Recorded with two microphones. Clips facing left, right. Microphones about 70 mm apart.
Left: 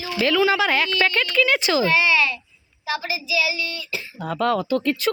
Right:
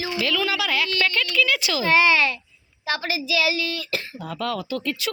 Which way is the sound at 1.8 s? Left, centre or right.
Right.